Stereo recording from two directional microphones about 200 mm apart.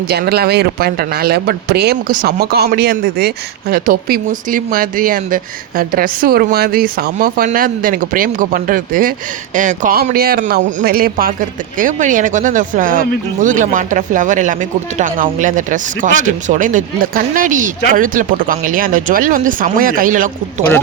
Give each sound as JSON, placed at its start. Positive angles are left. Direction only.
{"t": 0.1, "sound": "speech", "side_deg": -50}